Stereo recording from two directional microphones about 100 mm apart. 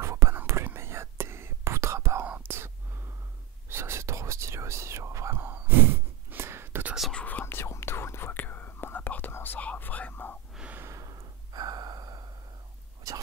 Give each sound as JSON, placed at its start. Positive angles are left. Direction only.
{"t": 0.0, "sound": "whispering", "side_deg": -30}
{"t": 3.7, "sound": "whispering", "side_deg": -25}
{"t": 7.0, "sound": "whispering", "side_deg": 5}
{"t": 7.2, "sound": "whispering", "side_deg": 20}
{"t": 10.8, "sound": "gasp", "side_deg": -30}
{"t": 13.0, "sound": "whispering", "side_deg": -35}